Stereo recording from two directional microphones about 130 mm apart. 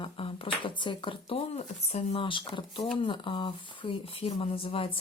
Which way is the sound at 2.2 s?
40° left (ahead or behind).